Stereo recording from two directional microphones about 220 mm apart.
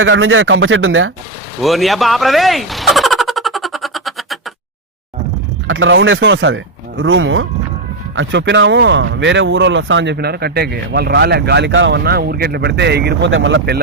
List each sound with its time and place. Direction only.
0.0 s speech: 60° right (ahead or behind)
1.6 s vehicle: centre (ahead or behind)
5.6 s speech: 60° right (ahead or behind)